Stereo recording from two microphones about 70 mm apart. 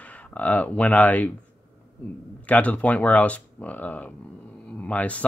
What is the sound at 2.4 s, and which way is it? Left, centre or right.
Speech, left.